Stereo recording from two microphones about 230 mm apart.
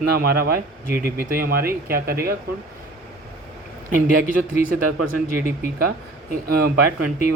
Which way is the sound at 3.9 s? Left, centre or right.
Right.